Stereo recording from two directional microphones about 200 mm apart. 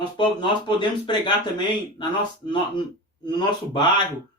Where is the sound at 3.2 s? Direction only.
20° left (ahead or behind).